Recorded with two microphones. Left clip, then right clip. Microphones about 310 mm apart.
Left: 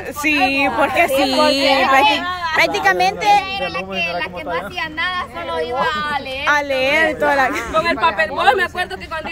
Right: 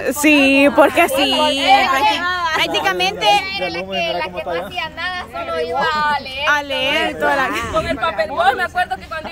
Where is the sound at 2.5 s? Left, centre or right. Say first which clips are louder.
Left 7 dB; centre.